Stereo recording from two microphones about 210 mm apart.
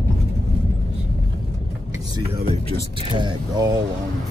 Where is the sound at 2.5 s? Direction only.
25° right (ahead or behind).